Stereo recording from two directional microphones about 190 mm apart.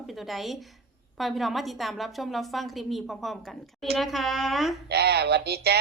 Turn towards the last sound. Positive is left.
turn(degrees=-60)  # may be behind; listen again after turning